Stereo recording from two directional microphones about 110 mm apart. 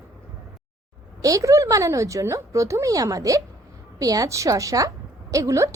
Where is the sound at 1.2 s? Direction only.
30° right (ahead or behind).